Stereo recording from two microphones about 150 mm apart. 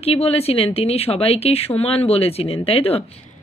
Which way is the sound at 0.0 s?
40° left (ahead or behind).